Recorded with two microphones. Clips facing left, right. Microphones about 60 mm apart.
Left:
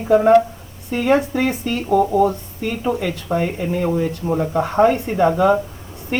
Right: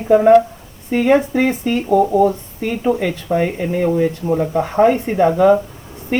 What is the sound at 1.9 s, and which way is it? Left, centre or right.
Speech, centre.